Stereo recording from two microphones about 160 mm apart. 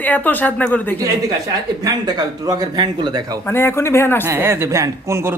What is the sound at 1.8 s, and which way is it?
Speech, 25° right (ahead or behind).